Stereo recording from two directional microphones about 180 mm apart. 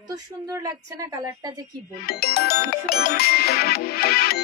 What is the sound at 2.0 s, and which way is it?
Music, 60° left (ahead or behind).